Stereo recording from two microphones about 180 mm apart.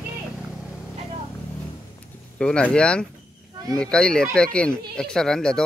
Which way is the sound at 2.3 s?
5° left (ahead or behind).